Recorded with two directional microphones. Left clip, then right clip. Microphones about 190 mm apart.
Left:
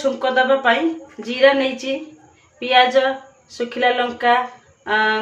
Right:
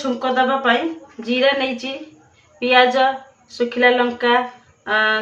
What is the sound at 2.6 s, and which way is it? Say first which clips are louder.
Speech: right 1 dB; 10° left (ahead or behind).